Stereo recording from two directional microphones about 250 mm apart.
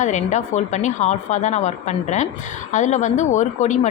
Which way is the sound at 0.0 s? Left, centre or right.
Left.